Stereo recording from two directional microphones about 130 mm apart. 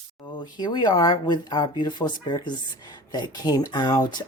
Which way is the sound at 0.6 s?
35° left (ahead or behind).